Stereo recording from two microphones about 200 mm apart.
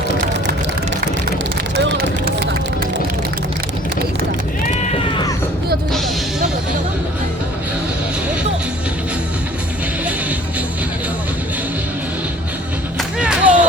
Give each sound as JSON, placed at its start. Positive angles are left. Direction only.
{"t": 1.7, "sound": "vehicle", "side_deg": -50}
{"t": 13.0, "sound": "music", "side_deg": -5}